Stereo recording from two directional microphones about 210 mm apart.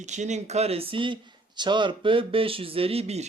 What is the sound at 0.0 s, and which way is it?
Speech, 35° right (ahead or behind).